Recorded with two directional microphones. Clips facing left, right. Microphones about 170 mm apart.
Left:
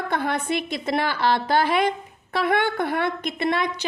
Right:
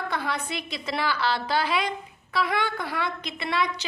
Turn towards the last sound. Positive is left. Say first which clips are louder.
# left 4 dB
turn(degrees=50)  # may be behind; listen again after turning